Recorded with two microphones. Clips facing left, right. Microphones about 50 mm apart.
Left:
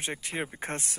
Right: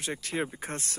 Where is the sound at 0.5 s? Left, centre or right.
Left.